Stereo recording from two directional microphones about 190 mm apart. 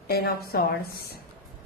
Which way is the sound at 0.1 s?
55° left (ahead or behind).